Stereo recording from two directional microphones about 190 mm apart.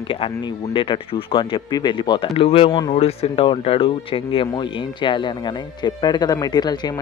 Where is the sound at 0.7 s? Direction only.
25° left (ahead or behind).